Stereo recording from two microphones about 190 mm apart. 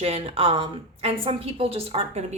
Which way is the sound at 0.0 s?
30° right (ahead or behind).